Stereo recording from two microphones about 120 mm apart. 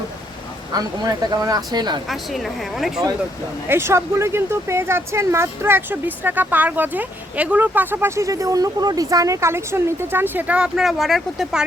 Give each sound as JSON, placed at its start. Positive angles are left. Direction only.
{"t": 0.7, "sound": "speech", "side_deg": -35}
{"t": 2.0, "sound": "speech", "side_deg": 0}
{"t": 3.7, "sound": "speech", "side_deg": -20}